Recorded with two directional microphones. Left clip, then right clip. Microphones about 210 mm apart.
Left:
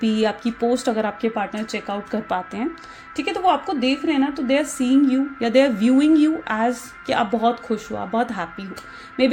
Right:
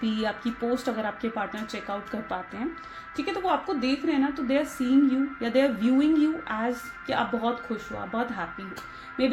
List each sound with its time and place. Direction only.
0.0 s a woman's voice: 45° left (ahead or behind)